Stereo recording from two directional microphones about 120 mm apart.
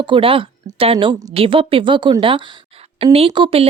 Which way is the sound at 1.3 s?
50° right (ahead or behind).